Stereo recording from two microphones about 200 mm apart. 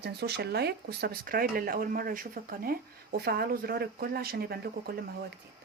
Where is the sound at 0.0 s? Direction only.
55° right (ahead or behind).